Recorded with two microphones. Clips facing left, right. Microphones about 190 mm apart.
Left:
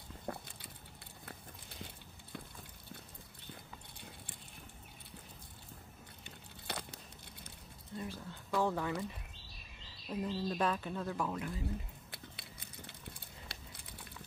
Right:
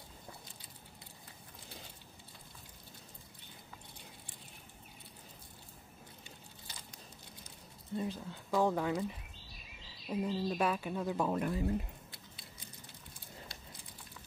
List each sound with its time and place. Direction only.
0.3 s a sound: 65° left (ahead or behind)
6.7 s a sound: 65° left (ahead or behind)
8.0 s speech: 20° right (ahead or behind)
10.0 s speech: 10° right (ahead or behind)
11.3 s speech: 50° right (ahead or behind)
12.1 s biting: 65° left (ahead or behind)